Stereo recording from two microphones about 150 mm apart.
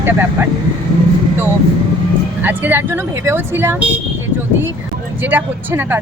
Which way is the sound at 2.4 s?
10° right (ahead or behind).